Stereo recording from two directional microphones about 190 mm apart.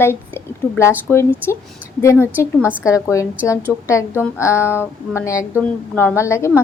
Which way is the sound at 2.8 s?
15° left (ahead or behind).